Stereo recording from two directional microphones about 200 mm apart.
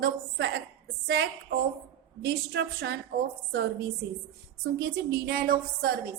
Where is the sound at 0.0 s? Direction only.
55° right (ahead or behind).